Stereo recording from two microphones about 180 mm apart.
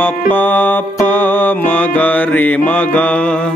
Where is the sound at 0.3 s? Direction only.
10° left (ahead or behind).